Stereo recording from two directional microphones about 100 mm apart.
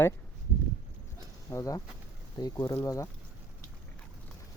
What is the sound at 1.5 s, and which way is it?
Speech, 35° left (ahead or behind).